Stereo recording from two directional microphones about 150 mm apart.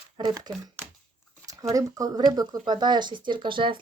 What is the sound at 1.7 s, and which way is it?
Speech, 25° right (ahead or behind).